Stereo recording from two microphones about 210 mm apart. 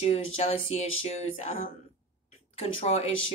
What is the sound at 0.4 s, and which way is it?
Speech, 30° left (ahead or behind).